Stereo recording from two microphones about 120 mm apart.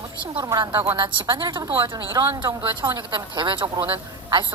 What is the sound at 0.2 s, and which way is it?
Speech, 35° right (ahead or behind).